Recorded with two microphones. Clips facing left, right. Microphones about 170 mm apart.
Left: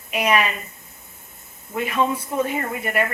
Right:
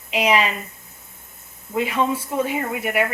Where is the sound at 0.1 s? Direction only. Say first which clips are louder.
Right 1 dB; 15° right (ahead or behind).